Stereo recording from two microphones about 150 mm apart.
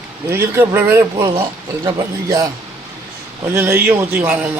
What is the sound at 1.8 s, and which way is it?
Speech, 25° right (ahead or behind).